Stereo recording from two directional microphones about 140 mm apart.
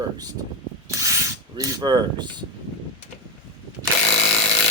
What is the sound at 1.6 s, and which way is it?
Speech, 30° right (ahead or behind).